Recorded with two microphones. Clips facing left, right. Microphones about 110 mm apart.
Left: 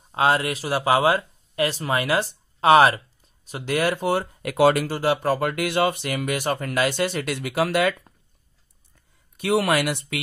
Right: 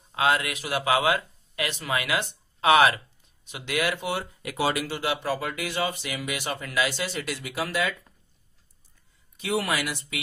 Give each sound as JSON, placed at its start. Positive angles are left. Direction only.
{"t": 0.1, "sound": "speech", "side_deg": 35}
{"t": 9.4, "sound": "speech", "side_deg": 60}